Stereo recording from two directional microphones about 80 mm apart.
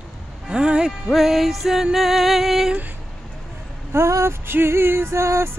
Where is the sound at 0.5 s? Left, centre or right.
Centre.